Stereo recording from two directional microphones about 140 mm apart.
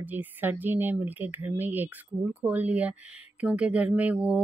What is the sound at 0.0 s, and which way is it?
Speech, 10° right (ahead or behind).